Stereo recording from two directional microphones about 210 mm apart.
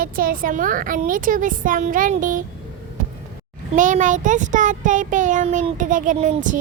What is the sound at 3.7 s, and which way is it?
Child singing, 35° right (ahead or behind).